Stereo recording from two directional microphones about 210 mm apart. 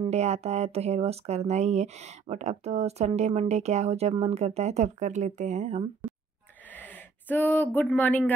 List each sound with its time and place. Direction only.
0.0 s speech: 30° right (ahead or behind)
6.7 s speech: 10° left (ahead or behind)